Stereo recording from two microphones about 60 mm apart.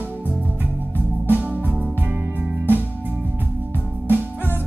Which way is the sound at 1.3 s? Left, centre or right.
Right.